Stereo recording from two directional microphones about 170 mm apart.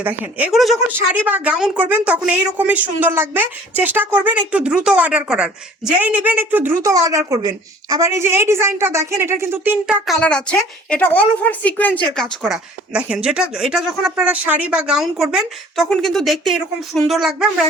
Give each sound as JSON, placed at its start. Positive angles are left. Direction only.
{"t": 0.0, "sound": "a woman's voice", "side_deg": -10}
{"t": 10.1, "sound": "a woman's voice", "side_deg": 5}